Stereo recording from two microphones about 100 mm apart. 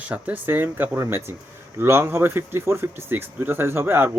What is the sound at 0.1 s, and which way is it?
Speech, 20° right (ahead or behind).